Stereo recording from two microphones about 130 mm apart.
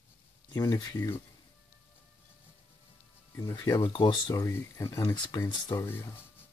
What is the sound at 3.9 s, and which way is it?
Speech, 35° left (ahead or behind).